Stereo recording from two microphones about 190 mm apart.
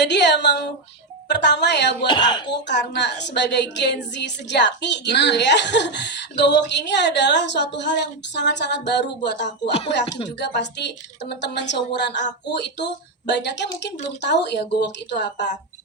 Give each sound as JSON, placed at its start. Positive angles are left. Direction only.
{"t": 0.0, "sound": "speech", "side_deg": 65}